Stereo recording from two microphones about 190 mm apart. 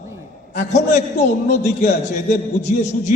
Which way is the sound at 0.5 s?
40° left (ahead or behind).